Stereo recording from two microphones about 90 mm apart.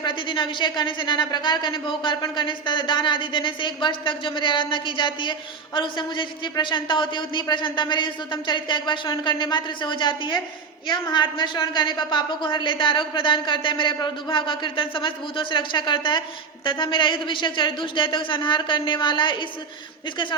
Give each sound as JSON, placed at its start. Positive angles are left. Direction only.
{"t": 0.0, "sound": "a woman's voice", "side_deg": 65}